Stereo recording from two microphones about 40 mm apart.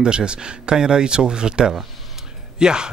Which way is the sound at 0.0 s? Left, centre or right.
Right.